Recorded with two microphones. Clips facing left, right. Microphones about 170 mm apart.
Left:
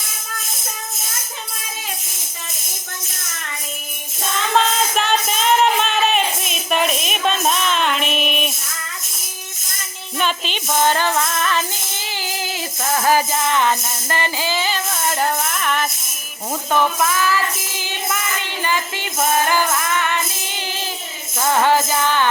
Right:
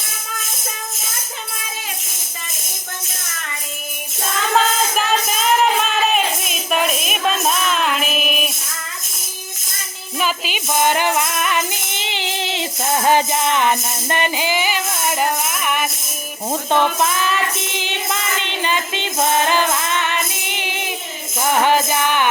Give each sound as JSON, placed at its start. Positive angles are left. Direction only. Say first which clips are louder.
{"t": 4.5, "sound": "music", "louder": "even", "side_deg": -5}
{"t": 10.2, "sound": "music", "louder": "even", "side_deg": -5}
{"t": 16.5, "sound": "music", "louder": "right 1 dB", "side_deg": -25}